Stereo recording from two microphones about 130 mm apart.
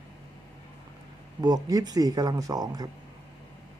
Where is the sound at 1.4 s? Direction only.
30° right (ahead or behind).